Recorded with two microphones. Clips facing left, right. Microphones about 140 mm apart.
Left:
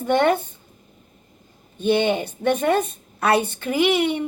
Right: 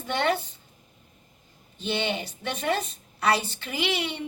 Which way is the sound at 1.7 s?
50° left (ahead or behind).